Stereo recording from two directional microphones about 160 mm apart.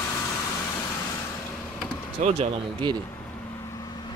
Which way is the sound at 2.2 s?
50° right (ahead or behind).